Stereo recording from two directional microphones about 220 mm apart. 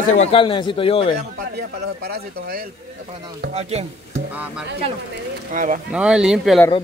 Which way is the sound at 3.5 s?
30° right (ahead or behind).